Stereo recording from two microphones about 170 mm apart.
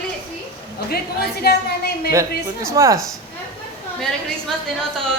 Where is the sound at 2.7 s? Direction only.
20° right (ahead or behind).